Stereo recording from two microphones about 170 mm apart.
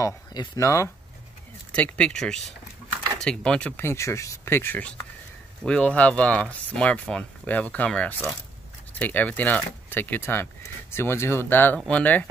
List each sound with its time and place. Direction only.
0.0 s speech: 20° left (ahead or behind)
1.8 s speech: 5° left (ahead or behind)